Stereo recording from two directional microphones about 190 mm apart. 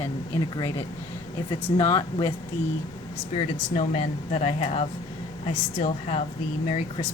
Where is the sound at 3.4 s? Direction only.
30° left (ahead or behind).